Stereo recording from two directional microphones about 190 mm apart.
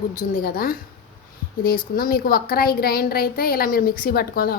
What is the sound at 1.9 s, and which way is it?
A woman's voice, 50° left (ahead or behind).